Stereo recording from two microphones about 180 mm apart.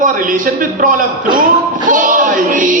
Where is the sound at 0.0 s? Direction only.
50° right (ahead or behind).